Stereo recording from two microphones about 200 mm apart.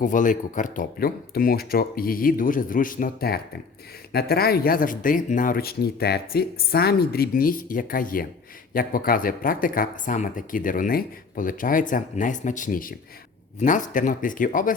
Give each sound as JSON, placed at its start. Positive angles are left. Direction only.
{"t": 0.0, "sound": "speech", "side_deg": 40}